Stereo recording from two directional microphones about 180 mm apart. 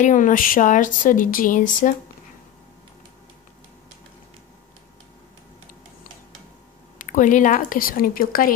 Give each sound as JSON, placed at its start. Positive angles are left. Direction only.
{"t": 0.0, "sound": "speech", "side_deg": 45}
{"t": 7.0, "sound": "speech", "side_deg": 45}